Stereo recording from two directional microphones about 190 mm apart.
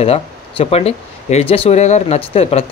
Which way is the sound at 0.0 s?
30° left (ahead or behind).